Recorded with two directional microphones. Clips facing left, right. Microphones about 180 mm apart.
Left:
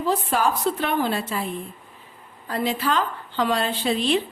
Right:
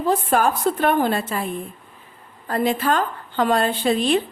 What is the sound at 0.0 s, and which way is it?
A woman's voice, 50° right (ahead or behind).